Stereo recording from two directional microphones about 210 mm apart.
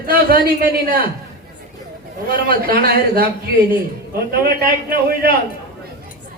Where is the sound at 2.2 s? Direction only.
45° right (ahead or behind).